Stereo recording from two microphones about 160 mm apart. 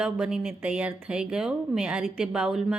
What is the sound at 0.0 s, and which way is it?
Speech, 5° right (ahead or behind).